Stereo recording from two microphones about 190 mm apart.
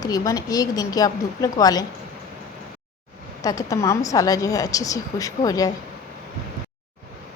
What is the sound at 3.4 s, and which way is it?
A woman's voice, 15° left (ahead or behind).